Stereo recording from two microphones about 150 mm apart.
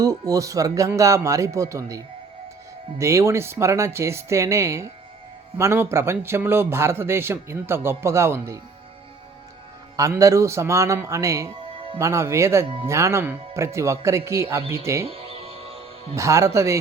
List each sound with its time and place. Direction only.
0.0 s a man's voice: 25° right (ahead or behind)
10.0 s speech: 20° right (ahead or behind)
15.0 s music: 40° right (ahead or behind)
16.1 s speech: 20° right (ahead or behind)